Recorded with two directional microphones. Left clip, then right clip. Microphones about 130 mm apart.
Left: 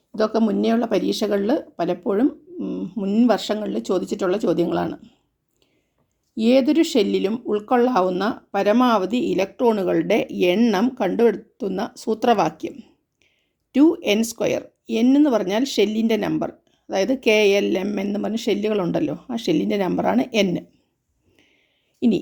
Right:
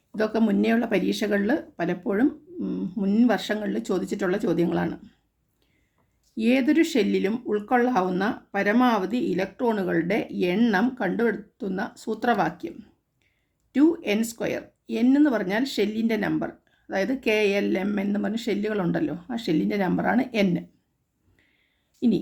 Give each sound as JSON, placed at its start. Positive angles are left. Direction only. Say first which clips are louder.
{"t": 0.3, "sound": "speech", "louder": "left 1 dB", "side_deg": 25}
{"t": 1.2, "sound": "speech", "louder": "left 4 dB", "side_deg": 40}
{"t": 3.2, "sound": "speech", "louder": "left 4 dB", "side_deg": 40}
{"t": 6.3, "sound": "speech", "louder": "left 5 dB", "side_deg": 40}
{"t": 13.7, "sound": "speech", "louder": "left 5 dB", "side_deg": 50}